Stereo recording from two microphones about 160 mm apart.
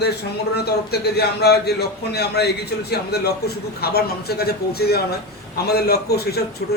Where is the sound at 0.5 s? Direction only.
90° left.